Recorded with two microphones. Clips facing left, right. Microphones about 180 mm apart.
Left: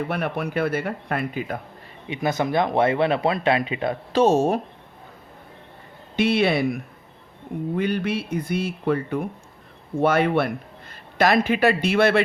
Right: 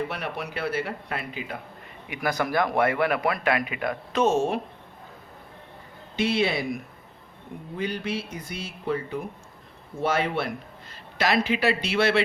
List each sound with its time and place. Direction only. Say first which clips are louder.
0.1 s speech: left 7 dB; 55° left (ahead or behind)
2.0 s speech: left 4 dB; 20° left (ahead or behind); by 4.6 s 40° left (ahead or behind)
6.1 s speech: left 5 dB; 60° left (ahead or behind)
7.8 s speech: left 4 dB; 60° left (ahead or behind)